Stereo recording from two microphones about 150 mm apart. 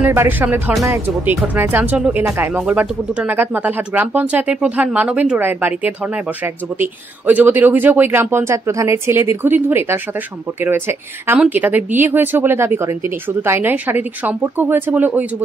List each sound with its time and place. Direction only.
0.0 s speech: 15° right (ahead or behind)